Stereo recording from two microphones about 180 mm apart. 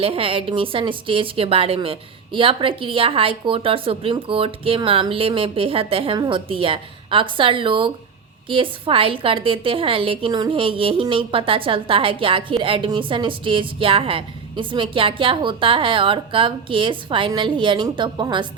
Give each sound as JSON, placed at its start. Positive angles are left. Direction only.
{"t": 0.0, "sound": "a woman's voice", "side_deg": -30}